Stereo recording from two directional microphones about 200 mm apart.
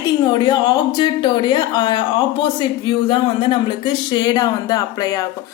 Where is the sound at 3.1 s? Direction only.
25° left (ahead or behind).